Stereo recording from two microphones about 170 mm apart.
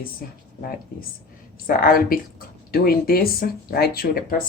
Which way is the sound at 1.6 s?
60° left (ahead or behind).